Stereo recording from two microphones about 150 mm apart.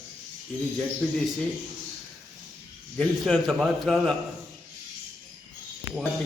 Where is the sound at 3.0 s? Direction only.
Centre (ahead or behind).